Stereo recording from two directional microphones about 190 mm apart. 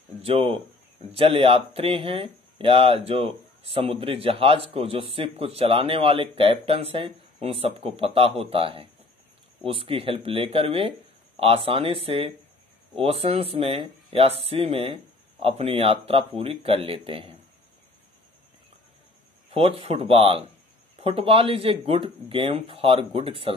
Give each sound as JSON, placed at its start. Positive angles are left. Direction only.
{"t": 0.2, "sound": "speech", "side_deg": -30}
{"t": 19.5, "sound": "speech", "side_deg": -30}